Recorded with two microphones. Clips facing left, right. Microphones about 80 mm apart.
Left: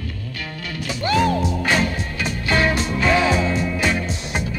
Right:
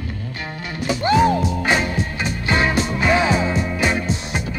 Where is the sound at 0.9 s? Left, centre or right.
Right.